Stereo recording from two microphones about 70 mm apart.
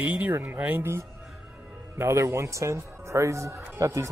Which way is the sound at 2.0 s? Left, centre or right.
Right.